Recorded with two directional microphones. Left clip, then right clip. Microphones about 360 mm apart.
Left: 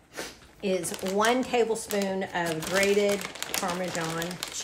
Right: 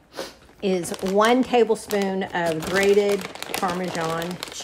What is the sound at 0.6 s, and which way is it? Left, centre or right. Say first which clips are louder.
Speech: right 5 dB; right.